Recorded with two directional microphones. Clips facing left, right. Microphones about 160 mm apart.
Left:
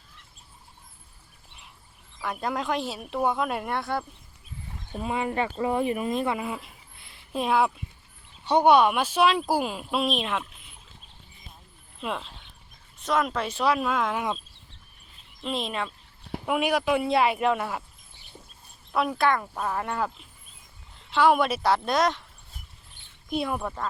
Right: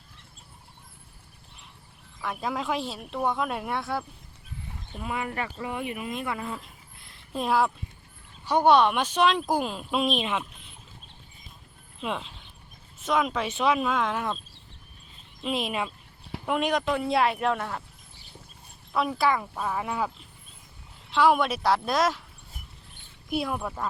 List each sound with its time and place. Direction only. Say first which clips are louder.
2.2 s speech: left 1 dB; centre (ahead or behind)
4.9 s speech: left 4 dB; 25° left (ahead or behind)
5.5 s speech: left 7 dB; 35° left (ahead or behind)
6.4 s a sound: left 2 dB; 10° left (ahead or behind)
8.4 s speech: left 1 dB; 15° left (ahead or behind); by 10.7 s centre (ahead or behind)
11.9 s speech: even; centre (ahead or behind)
15.4 s speech: right 1 dB; 5° right (ahead or behind)
16.5 s speech: left 2 dB; 5° left (ahead or behind)
18.9 s speech: left 1 dB; centre (ahead or behind)
21.1 s speech: left 1 dB; centre (ahead or behind)
23.3 s speech: left 1 dB; centre (ahead or behind)